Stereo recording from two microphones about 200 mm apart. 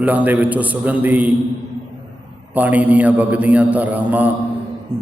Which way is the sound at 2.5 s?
10° right (ahead or behind).